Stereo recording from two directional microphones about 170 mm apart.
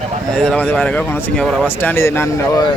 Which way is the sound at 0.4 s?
10° left (ahead or behind).